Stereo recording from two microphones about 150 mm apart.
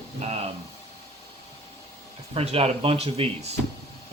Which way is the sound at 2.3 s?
40° right (ahead or behind).